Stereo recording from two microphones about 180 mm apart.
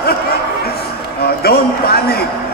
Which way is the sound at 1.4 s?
60° left (ahead or behind).